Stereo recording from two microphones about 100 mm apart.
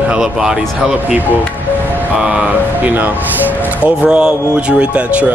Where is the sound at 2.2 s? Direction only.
15° right (ahead or behind).